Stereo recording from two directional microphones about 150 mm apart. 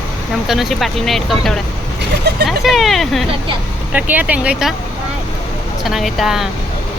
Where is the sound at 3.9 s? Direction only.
10° right (ahead or behind).